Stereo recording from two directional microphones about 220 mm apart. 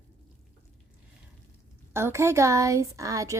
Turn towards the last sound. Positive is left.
turn(degrees=-15)  # may be behind; listen again after turning